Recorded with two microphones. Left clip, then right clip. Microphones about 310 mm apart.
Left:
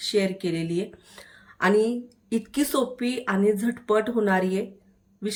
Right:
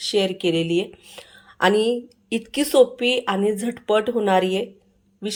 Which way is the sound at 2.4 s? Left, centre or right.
Centre.